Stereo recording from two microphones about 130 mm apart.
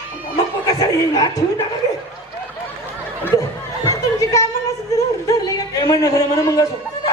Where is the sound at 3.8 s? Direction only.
25° left (ahead or behind).